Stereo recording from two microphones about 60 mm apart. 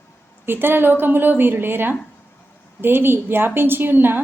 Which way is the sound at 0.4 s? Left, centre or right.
Right.